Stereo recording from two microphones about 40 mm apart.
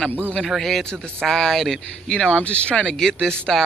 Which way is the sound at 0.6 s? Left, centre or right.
Centre.